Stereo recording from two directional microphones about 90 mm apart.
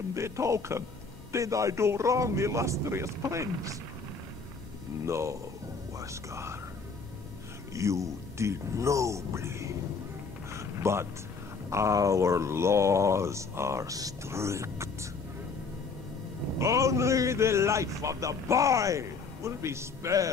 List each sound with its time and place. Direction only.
0.1 s a man's voice: 35° right (ahead or behind)
5.0 s a man's voice: 30° right (ahead or behind)
7.7 s a man's voice: 35° right (ahead or behind)
10.5 s a sound: 30° right (ahead or behind)
11.7 s a man's voice: 35° right (ahead or behind)
16.5 s a man's voice: 35° right (ahead or behind)